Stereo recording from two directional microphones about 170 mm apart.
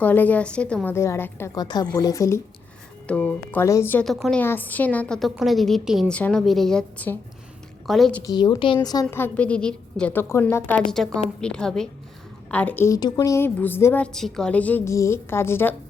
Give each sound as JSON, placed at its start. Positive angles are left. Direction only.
{"t": 0.0, "sound": "a woman's voice", "side_deg": 10}
{"t": 4.0, "sound": "a woman's voice", "side_deg": 0}
{"t": 8.2, "sound": "a woman's voice", "side_deg": 25}
{"t": 10.8, "sound": "a woman's voice", "side_deg": 0}